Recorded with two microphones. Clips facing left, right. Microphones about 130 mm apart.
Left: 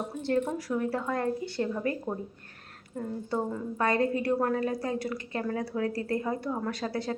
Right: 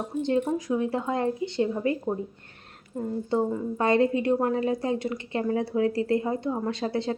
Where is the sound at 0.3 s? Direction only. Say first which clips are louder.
Right 2 dB; 15° right (ahead or behind).